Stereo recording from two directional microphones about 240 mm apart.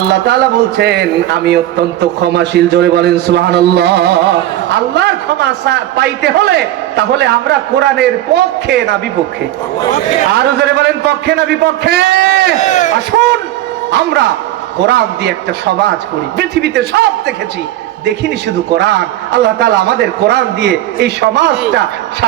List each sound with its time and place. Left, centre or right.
0.1 s a man's voice: right
10.3 s a man's voice: right
12.5 s speech: left
13.9 s a man's voice: right
16.4 s a man's voice: right
18.8 s a man's voice: right